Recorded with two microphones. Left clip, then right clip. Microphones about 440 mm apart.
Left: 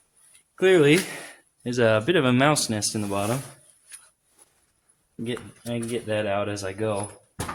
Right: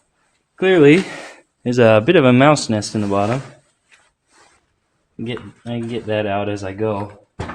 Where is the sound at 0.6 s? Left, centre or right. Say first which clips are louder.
Right 6 dB; left.